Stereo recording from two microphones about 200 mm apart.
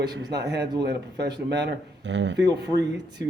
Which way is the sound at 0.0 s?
55° right (ahead or behind).